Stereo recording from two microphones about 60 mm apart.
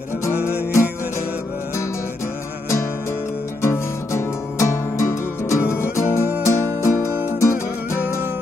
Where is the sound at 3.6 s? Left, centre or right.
Left.